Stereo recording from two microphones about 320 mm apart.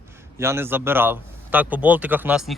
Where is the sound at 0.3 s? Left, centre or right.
Centre.